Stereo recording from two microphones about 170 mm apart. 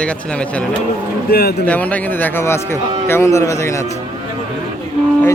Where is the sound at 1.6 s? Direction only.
10° left (ahead or behind).